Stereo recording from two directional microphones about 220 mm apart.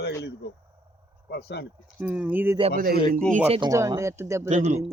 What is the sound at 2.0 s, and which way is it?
Speech, 5° right (ahead or behind).